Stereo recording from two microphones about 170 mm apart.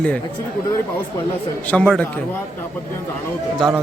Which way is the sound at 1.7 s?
Centre (ahead or behind).